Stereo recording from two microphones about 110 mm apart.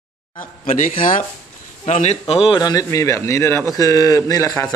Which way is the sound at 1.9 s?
90° left.